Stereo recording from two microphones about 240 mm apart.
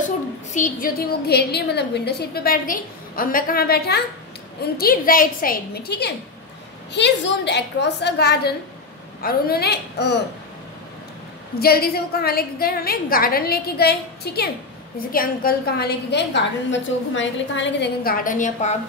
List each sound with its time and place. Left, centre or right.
0.5 s a woman's voice: left
11.6 s a woman's voice: left